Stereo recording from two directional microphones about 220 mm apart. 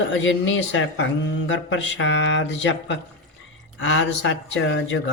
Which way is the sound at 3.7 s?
60° left (ahead or behind).